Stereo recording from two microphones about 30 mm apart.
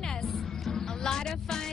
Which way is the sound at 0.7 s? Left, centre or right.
Centre.